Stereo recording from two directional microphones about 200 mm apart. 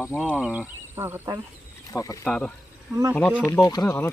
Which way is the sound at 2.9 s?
15° right (ahead or behind).